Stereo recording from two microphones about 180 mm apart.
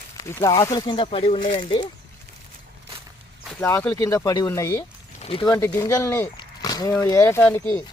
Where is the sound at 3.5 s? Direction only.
15° left (ahead or behind).